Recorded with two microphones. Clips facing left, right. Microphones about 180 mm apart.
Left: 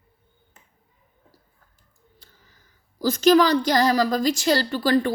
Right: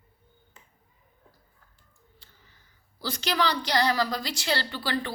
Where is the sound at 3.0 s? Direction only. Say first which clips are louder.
Left 11 dB; 45° left (ahead or behind).